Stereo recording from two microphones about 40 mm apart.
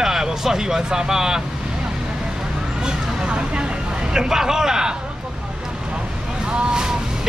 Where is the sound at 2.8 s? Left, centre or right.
Right.